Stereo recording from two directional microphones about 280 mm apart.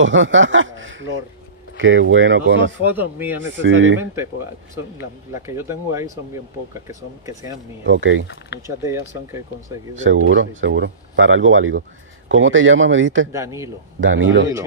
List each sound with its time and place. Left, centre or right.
0.0 s speech: right
3.0 s speech: centre
3.6 s speech: right
5.3 s speech: centre
7.8 s speech: right
8.6 s speech: centre
10.0 s speech: right
13.3 s speech: centre
14.0 s speech: right